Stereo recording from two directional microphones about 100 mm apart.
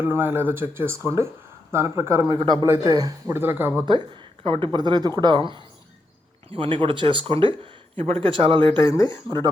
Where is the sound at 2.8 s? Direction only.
40° right (ahead or behind).